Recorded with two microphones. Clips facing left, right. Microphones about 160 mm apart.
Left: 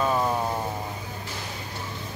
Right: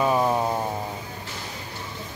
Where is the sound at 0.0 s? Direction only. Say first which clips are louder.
Right 3 dB; 15° right (ahead or behind).